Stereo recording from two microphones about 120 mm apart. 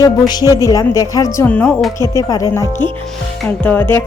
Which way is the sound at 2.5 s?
20° left (ahead or behind).